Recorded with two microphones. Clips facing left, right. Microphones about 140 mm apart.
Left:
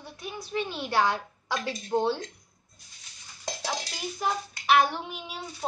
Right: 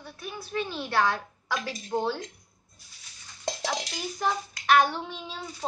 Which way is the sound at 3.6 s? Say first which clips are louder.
Left 1 dB; centre (ahead or behind).